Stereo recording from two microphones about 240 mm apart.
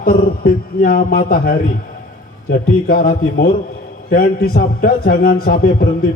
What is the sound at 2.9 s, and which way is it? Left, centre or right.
A man's voice, left.